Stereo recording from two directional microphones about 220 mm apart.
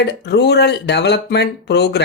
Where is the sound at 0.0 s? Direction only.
50° left (ahead or behind).